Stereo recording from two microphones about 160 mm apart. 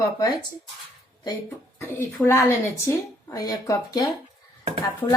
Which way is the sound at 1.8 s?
15° left (ahead or behind).